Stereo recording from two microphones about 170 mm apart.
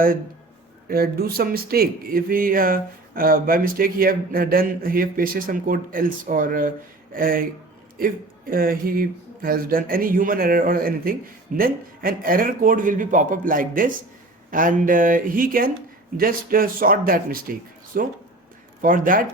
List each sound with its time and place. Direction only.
0.9 s speech: 65° right (ahead or behind)